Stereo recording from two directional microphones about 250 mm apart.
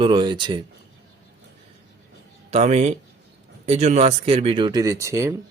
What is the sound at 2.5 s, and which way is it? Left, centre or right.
Speech, right.